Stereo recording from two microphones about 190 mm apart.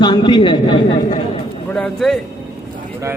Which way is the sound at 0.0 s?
25° left (ahead or behind).